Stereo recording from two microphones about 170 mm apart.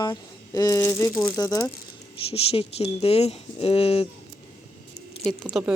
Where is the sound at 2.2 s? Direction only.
35° left (ahead or behind).